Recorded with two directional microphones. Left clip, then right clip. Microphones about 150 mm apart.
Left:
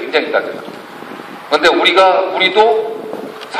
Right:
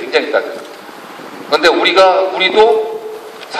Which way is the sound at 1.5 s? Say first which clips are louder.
Even; 45° right (ahead or behind).